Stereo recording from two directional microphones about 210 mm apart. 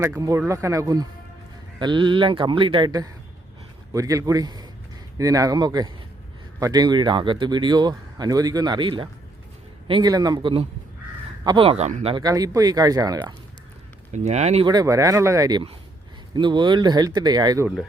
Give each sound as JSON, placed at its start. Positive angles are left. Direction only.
{"t": 0.0, "sound": "speech", "side_deg": -15}
{"t": 12.1, "sound": "speech", "side_deg": -20}
{"t": 14.1, "sound": "speech", "side_deg": -30}
{"t": 14.7, "sound": "speech", "side_deg": -15}